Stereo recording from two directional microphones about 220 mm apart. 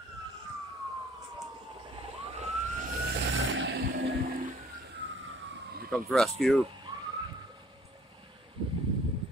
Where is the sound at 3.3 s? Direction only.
55° right (ahead or behind).